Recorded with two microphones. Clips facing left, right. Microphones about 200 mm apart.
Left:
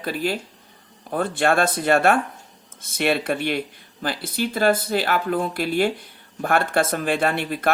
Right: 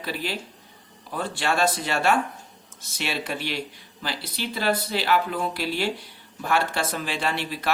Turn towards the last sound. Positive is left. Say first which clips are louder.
# left 4 dB
turn(degrees=55)  # may be behind; listen again after turning